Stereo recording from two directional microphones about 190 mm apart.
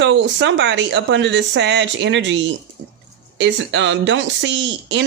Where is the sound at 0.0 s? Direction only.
70° right (ahead or behind).